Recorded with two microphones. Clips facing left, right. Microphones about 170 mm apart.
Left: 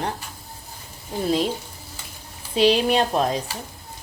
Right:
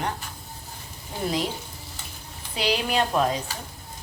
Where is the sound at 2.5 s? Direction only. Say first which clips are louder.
Left 7 dB; 30° left (ahead or behind).